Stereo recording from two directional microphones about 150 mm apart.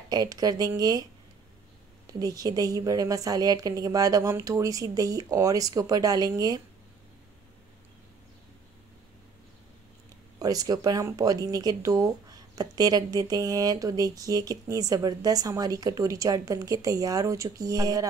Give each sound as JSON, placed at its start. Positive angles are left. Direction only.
{"t": 0.1, "sound": "speech", "side_deg": -25}
{"t": 2.0, "sound": "speech", "side_deg": -25}
{"t": 10.4, "sound": "speech", "side_deg": -25}